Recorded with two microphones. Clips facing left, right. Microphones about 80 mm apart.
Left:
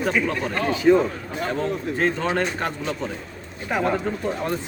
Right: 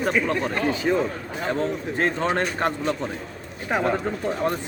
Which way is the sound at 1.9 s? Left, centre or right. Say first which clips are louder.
Even; right.